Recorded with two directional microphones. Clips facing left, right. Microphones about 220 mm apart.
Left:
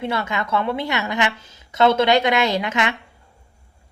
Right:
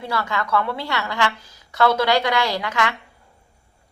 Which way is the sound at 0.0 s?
20° left (ahead or behind).